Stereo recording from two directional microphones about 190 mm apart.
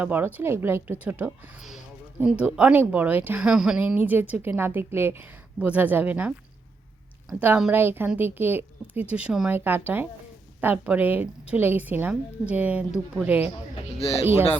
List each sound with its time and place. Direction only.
0.0 s speech: 10° right (ahead or behind)
14.0 s speech: 30° left (ahead or behind)